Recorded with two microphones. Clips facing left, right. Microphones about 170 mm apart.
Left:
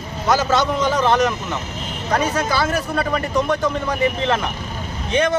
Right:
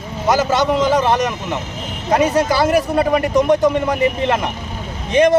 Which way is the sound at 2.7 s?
15° right (ahead or behind).